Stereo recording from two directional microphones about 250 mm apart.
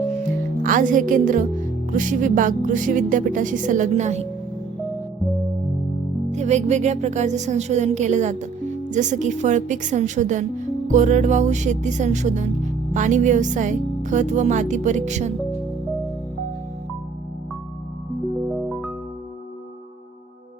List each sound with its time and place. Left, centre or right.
0.6 s speech: right
6.3 s a woman's voice: right
18.7 s music: centre